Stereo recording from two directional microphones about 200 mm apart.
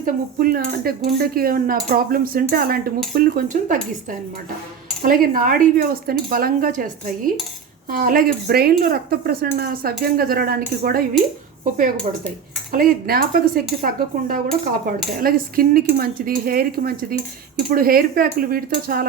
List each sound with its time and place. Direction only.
0.0 s cutlery: 45° right (ahead or behind)
3.2 s speech: 40° right (ahead or behind)
5.0 s cutlery: 45° right (ahead or behind)
12.7 s cutlery: 45° right (ahead or behind)